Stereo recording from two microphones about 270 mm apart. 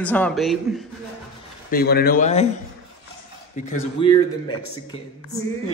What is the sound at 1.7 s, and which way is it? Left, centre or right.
Speech, left.